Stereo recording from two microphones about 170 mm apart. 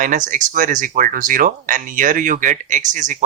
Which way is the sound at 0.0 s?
50° right (ahead or behind).